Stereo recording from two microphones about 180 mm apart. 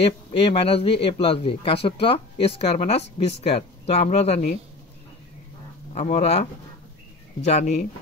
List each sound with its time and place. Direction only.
0.0 s speech: 30° left (ahead or behind)
5.9 s speech: 40° left (ahead or behind)